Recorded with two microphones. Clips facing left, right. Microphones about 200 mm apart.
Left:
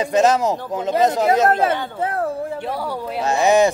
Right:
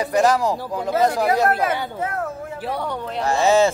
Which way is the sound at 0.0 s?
20° left (ahead or behind).